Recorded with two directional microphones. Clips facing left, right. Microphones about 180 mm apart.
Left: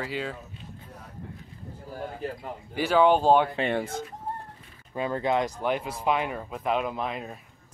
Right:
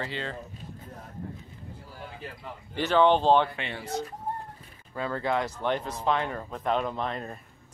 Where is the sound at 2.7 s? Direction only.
10° left (ahead or behind).